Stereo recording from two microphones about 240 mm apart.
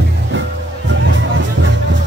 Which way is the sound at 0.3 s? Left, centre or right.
Right.